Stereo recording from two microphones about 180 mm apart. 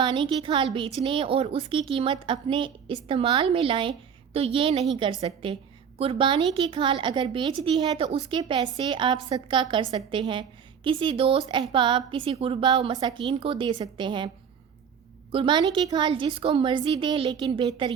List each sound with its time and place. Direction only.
0.0 s a woman's voice: 25° right (ahead or behind)
15.3 s a woman's voice: 25° right (ahead or behind)